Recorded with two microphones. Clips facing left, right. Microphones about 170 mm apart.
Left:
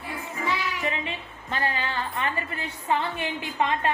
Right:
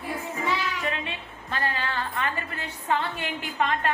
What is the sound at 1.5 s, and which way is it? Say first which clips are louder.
Speech: left 1 dB; 20° left (ahead or behind).